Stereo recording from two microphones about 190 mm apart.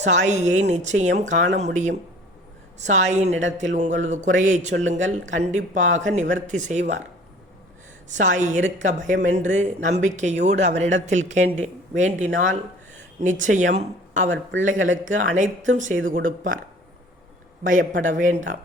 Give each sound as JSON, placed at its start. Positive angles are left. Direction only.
{"t": 0.0, "sound": "speech", "side_deg": -40}
{"t": 8.1, "sound": "speech", "side_deg": -40}
{"t": 17.6, "sound": "speech", "side_deg": -40}